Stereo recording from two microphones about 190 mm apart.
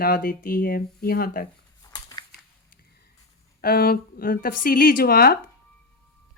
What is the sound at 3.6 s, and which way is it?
A woman's voice, 50° left (ahead or behind).